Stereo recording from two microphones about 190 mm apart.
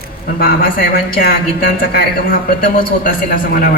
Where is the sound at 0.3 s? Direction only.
50° left (ahead or behind).